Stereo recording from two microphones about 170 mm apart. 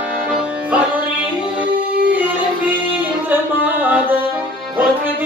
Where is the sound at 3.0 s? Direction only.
10° right (ahead or behind).